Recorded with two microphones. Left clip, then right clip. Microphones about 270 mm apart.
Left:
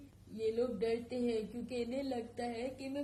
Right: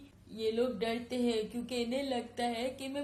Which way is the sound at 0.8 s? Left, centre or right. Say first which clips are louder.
Right 1 dB; right.